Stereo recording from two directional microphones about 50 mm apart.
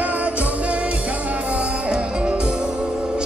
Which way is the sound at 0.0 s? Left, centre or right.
Right.